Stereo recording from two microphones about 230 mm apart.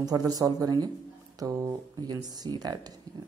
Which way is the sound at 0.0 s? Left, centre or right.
Centre.